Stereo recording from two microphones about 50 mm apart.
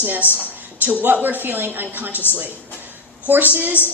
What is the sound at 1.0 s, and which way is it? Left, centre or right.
A woman's voice, right.